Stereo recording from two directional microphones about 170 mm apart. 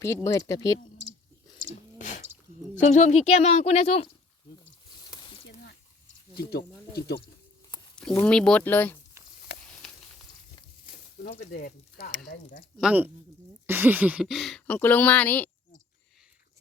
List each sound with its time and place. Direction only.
0.0 s speech: 20° left (ahead or behind)
2.0 s a sound: 45° left (ahead or behind)
2.8 s speech: 40° left (ahead or behind)
4.9 s a sound: 25° left (ahead or behind)
8.2 s speech: 5° left (ahead or behind)
9.2 s stir: 15° right (ahead or behind)
10.8 s a sound: 55° left (ahead or behind)
12.2 s speech: 65° left (ahead or behind)
12.8 s speech: 10° right (ahead or behind); by 15.4 s 10° left (ahead or behind)